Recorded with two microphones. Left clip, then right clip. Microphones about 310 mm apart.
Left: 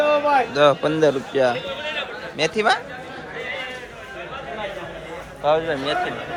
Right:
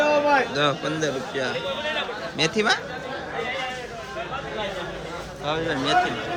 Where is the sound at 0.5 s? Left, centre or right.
Centre.